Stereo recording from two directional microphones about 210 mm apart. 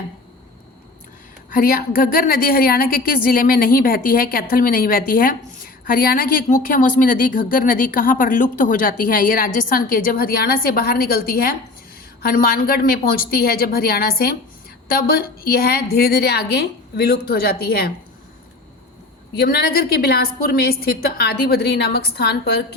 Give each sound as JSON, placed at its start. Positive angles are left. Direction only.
{"t": 1.5, "sound": "speech", "side_deg": 45}
{"t": 19.4, "sound": "speech", "side_deg": 50}